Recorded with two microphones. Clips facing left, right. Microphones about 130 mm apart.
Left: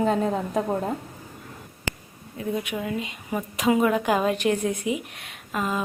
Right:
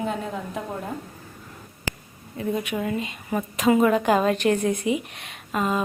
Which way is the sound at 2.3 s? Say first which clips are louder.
Right 2 dB; 5° left (ahead or behind).